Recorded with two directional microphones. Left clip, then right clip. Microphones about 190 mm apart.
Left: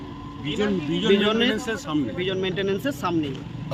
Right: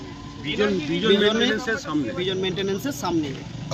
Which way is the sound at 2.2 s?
5° left (ahead or behind).